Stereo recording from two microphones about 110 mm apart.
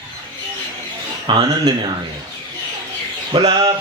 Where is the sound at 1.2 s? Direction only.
45° right (ahead or behind).